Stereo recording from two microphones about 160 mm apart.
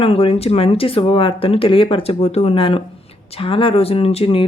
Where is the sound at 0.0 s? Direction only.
35° left (ahead or behind).